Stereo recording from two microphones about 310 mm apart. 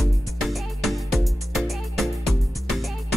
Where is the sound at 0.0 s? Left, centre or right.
Centre.